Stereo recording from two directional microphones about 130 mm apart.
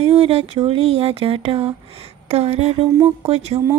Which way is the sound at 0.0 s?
50° right (ahead or behind).